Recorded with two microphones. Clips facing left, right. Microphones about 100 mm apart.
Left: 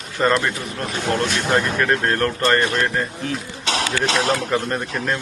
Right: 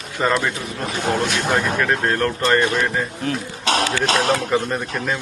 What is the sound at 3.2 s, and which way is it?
Speech, 45° right (ahead or behind).